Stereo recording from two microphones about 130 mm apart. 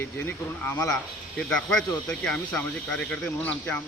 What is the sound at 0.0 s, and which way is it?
Speech, 15° left (ahead or behind).